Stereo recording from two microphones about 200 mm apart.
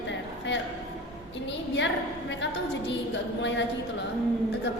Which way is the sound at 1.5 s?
60° left (ahead or behind).